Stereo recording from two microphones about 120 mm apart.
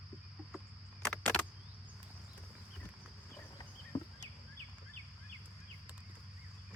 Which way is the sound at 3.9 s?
35° left (ahead or behind).